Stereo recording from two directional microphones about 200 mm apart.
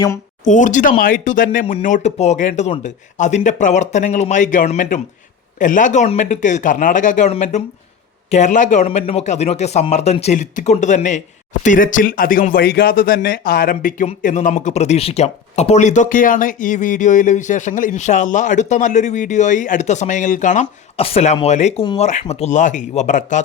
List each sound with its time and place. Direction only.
0.4 s a man's voice: 40° left (ahead or behind)